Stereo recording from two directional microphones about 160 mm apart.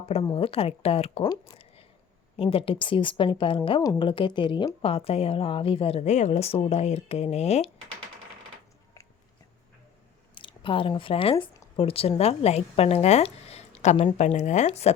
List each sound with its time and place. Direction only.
0.0 s a woman's voice: 35° left (ahead or behind)
1.2 s a sound: 25° left (ahead or behind)
2.3 s a woman's voice: 35° left (ahead or behind)
10.3 s a woman's voice: 30° left (ahead or behind)